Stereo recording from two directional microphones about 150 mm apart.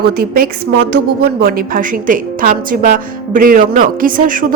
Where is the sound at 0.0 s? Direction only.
90° right.